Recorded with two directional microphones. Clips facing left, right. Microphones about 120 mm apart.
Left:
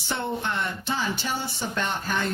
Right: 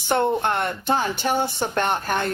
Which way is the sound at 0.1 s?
55° right (ahead or behind).